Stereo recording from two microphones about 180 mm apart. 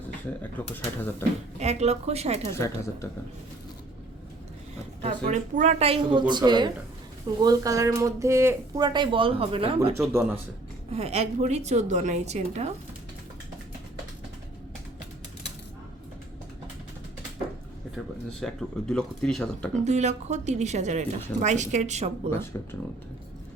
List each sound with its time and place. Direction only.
0.5 s speech: 10° left (ahead or behind)
1.5 s speech: 35° right (ahead or behind)
2.5 s speech: 15° left (ahead or behind)
5.0 s speech: 40° right (ahead or behind)
9.9 s speech: 15° right (ahead or behind)
10.9 s speech: 35° right (ahead or behind)
17.9 s speech: centre (ahead or behind)
19.7 s speech: 40° right (ahead or behind)
22.5 s speech: 15° left (ahead or behind)